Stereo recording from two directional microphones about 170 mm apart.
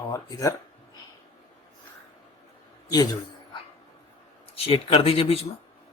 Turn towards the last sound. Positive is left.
turn(degrees=35)  # may be behind; listen again after turning